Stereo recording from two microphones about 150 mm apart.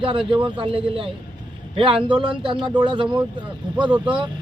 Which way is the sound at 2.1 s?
30° right (ahead or behind).